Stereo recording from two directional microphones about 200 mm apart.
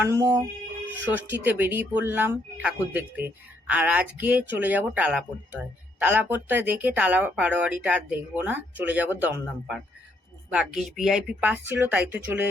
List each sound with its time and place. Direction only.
0.1 s speech: 15° right (ahead or behind)